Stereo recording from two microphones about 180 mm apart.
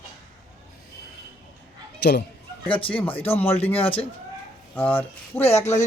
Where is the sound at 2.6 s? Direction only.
30° left (ahead or behind).